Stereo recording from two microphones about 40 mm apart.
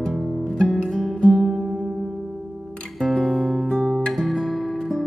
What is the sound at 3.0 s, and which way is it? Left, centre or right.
Music, centre.